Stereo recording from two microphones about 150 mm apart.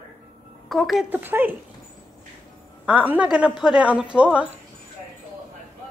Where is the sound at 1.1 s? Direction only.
10° right (ahead or behind).